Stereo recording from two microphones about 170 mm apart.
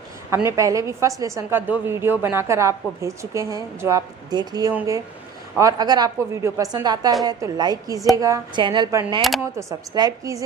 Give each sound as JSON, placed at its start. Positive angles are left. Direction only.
{"t": 0.4, "sound": "a woman's voice", "side_deg": -20}